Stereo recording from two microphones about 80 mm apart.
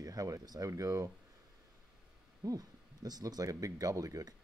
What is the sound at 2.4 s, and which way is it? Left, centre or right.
Speech, right.